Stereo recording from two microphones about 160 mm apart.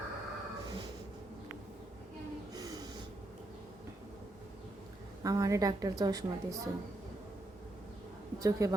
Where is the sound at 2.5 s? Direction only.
25° right (ahead or behind).